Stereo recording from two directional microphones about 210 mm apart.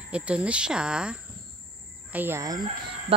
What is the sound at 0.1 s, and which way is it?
Speech, 5° right (ahead or behind).